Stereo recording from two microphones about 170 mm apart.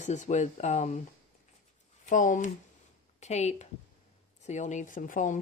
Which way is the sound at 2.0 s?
50° left (ahead or behind).